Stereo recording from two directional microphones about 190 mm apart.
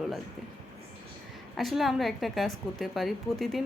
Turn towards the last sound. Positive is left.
turn(degrees=0)  # may be behind; listen again after turning